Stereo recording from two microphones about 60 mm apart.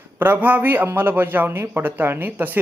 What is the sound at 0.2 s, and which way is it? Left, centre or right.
A man's voice, right.